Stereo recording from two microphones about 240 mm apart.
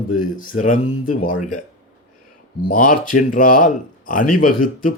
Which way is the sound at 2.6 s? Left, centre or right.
Left.